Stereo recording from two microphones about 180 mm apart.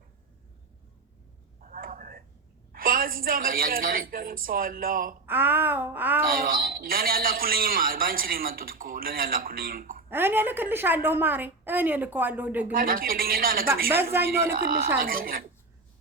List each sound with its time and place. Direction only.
1.7 s a sound: 50° right (ahead or behind)
2.7 s a man's voice: 55° right (ahead or behind)
5.2 s a woman's voice: 10° right (ahead or behind)
6.2 s a man's voice: 55° right (ahead or behind)
10.1 s a woman's voice: 10° right (ahead or behind)
12.7 s a man's voice: 55° right (ahead or behind)
13.9 s a woman's voice: 10° right (ahead or behind)
14.5 s a woman's voice: 55° right (ahead or behind)